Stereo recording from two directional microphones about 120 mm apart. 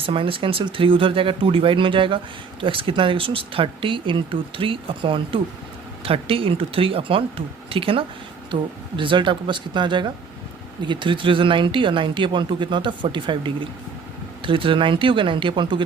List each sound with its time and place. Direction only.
0.0 s speech: 50° right (ahead or behind)